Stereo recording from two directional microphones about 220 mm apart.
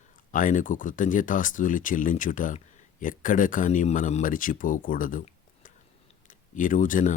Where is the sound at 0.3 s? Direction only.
35° left (ahead or behind).